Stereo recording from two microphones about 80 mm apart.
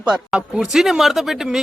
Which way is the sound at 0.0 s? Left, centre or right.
Centre.